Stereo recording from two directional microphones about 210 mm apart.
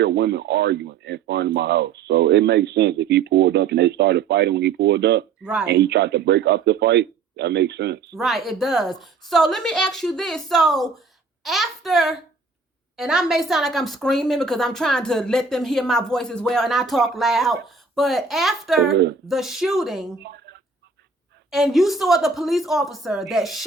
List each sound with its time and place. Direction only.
0.0 s speech: 55° right (ahead or behind)
5.4 s speech: 5° right (ahead or behind)
5.6 s speech: 55° right (ahead or behind)
8.1 s a woman's voice: centre (ahead or behind)
20.2 s a sound: 55° right (ahead or behind)
21.5 s a woman's voice: centre (ahead or behind)